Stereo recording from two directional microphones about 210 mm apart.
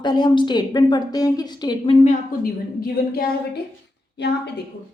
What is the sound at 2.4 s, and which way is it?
A woman's voice, 45° left (ahead or behind).